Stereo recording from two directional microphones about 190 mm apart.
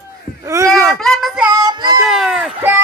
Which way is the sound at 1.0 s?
Centre (ahead or behind).